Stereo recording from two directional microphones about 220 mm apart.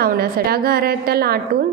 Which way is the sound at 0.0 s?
45° right (ahead or behind).